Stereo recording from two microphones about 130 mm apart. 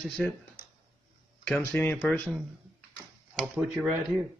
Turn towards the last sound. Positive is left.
turn(degrees=-5)  # may be behind; listen again after turning